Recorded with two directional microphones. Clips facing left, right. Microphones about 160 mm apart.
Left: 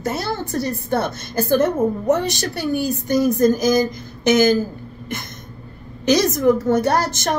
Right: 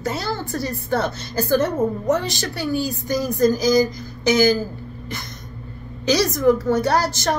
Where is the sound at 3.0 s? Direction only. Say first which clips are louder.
Left 3 dB; 50° left (ahead or behind).